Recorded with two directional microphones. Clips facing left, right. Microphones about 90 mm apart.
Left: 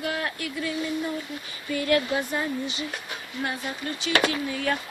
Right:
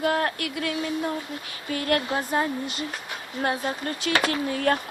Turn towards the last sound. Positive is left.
turn(degrees=-50)  # may be behind; listen again after turning